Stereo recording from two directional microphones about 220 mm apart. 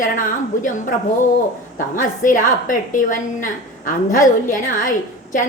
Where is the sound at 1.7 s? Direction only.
35° left (ahead or behind).